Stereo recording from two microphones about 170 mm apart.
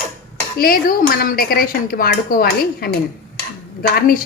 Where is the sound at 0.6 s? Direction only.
60° left (ahead or behind).